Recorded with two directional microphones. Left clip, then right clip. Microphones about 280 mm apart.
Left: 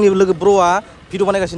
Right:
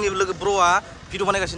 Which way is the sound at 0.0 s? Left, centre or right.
Centre.